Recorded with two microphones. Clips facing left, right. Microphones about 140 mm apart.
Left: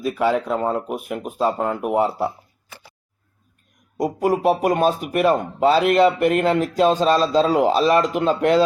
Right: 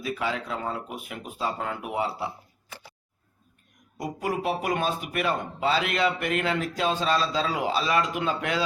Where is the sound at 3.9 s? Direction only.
45° left (ahead or behind).